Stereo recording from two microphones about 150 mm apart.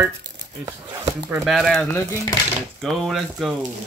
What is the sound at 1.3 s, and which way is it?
Speech, centre (ahead or behind).